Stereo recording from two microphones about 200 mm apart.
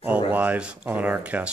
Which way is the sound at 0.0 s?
10° right (ahead or behind).